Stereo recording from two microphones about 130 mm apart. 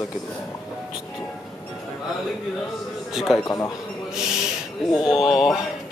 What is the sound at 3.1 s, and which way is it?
Speech, centre (ahead or behind).